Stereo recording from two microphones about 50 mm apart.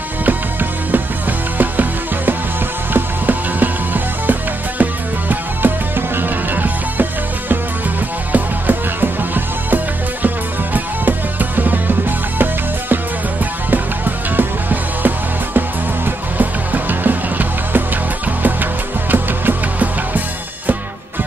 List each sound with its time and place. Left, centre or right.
0.2 s music: right
13.7 s music: right